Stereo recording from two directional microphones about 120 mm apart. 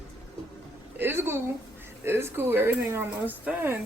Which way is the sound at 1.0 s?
20° right (ahead or behind).